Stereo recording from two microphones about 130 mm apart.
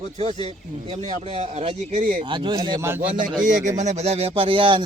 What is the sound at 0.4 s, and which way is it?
A man's voice, 50° right (ahead or behind).